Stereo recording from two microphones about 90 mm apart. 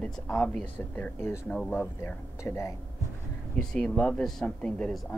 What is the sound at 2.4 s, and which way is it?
Speech, 35° left (ahead or behind).